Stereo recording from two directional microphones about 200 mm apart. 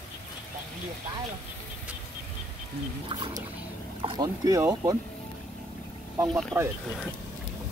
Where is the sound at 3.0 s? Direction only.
25° right (ahead or behind).